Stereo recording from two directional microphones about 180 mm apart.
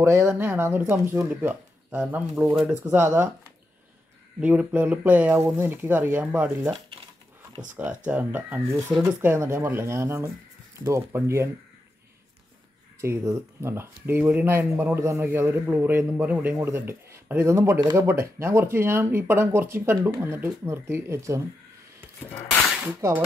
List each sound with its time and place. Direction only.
0.0 s speech: 15° right (ahead or behind)
4.4 s speech: 10° right (ahead or behind)
7.7 s speech: 10° right (ahead or behind)
13.0 s speech: 15° right (ahead or behind)
22.9 s speech: 15° right (ahead or behind)